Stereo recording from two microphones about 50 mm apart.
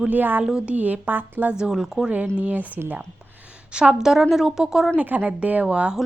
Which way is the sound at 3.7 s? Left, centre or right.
Centre.